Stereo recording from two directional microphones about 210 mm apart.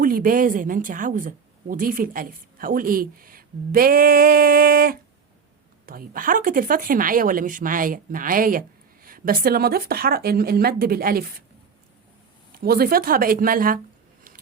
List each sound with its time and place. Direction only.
0.0 s speech: 40° right (ahead or behind)
12.5 s speech: 45° right (ahead or behind)